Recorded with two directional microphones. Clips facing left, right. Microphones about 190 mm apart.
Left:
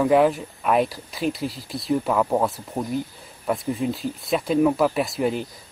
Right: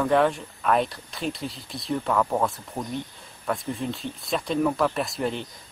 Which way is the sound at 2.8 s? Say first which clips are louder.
Left 5 dB; 15° left (ahead or behind).